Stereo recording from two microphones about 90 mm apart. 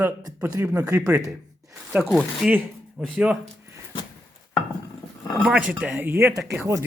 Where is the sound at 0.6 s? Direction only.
15° right (ahead or behind).